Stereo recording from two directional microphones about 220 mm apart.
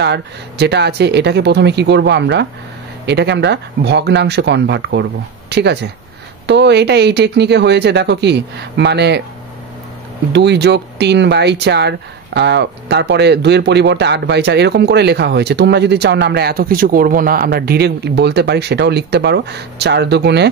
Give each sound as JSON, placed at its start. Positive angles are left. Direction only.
{"t": 0.0, "sound": "speech", "side_deg": -50}
{"t": 10.3, "sound": "speech", "side_deg": -50}